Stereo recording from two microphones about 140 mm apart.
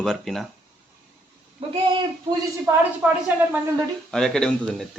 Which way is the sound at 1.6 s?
40° right (ahead or behind).